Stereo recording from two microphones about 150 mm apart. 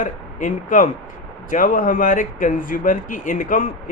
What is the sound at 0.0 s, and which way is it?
A man's voice, 55° left (ahead or behind).